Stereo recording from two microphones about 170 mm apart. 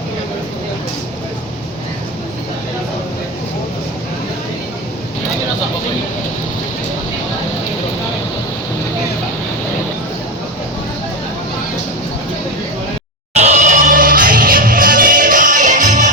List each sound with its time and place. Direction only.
13.3 s music: 40° right (ahead or behind)